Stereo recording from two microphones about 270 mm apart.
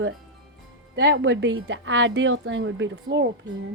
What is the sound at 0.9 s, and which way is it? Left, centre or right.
A woman's voice, right.